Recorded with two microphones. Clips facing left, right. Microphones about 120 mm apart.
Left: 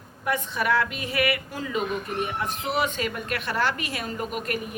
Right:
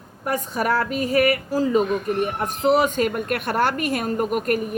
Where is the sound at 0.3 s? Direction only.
40° right (ahead or behind).